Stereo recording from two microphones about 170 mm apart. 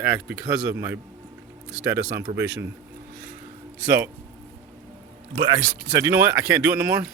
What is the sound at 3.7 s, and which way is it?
Speech, 10° right (ahead or behind).